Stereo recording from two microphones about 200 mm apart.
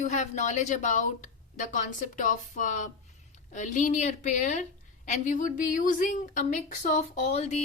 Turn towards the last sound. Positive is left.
turn(degrees=35)  # may be behind; listen again after turning